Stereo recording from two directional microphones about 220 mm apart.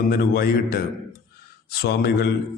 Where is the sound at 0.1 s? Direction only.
45° left (ahead or behind).